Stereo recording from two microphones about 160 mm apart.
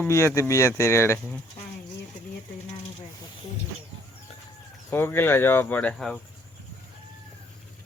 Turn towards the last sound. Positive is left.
turn(degrees=5)  # may be behind; listen again after turning